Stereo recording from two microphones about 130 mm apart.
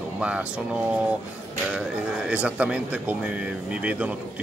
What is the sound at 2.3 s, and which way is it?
Speech, 10° right (ahead or behind).